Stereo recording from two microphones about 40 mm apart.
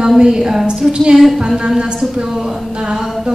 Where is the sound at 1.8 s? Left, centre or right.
Centre.